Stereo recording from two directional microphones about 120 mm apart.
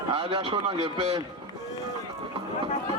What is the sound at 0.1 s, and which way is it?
Speech, 50° right (ahead or behind).